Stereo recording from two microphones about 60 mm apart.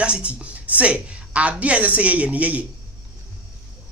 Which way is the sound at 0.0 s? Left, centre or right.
Centre.